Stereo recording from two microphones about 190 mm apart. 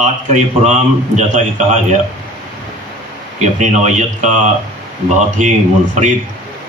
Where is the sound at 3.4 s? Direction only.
40° right (ahead or behind).